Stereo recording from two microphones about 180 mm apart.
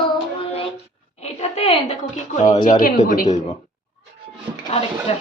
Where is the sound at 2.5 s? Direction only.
45° left (ahead or behind).